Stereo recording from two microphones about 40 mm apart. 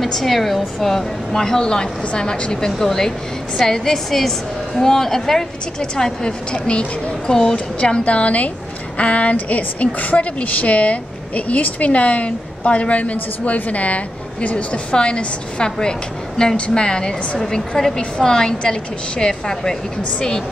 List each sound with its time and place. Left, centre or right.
0.0 s a woman's voice: centre; by 2.5 s left
2.8 s a woman's voice: centre